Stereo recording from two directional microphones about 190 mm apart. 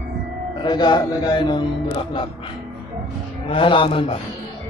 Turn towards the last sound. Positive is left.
turn(degrees=25)  # may be behind; listen again after turning